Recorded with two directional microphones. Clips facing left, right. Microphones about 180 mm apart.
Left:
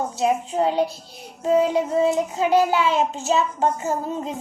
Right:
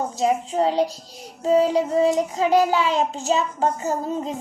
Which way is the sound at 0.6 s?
35° right (ahead or behind).